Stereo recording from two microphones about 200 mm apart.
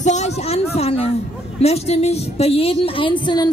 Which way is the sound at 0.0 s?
35° left (ahead or behind).